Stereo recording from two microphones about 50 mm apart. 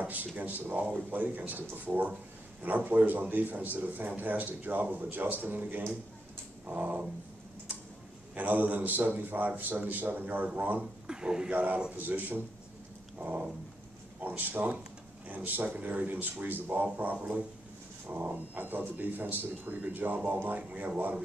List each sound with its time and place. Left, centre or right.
0.0 s speech: right
6.6 s a sound: right
8.4 s speech: right
11.1 s speech: centre
11.5 s speech: right
14.2 s speech: right